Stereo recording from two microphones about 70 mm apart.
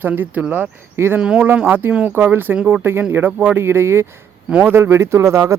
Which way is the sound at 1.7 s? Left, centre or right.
Right.